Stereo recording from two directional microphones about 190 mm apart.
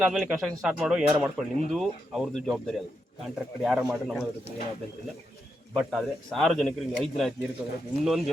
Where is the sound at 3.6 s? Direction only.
5° right (ahead or behind).